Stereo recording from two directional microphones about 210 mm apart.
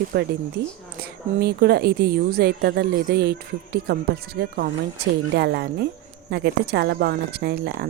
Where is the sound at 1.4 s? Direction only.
50° right (ahead or behind).